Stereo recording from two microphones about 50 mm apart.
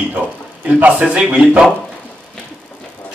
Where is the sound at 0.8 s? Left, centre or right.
Right.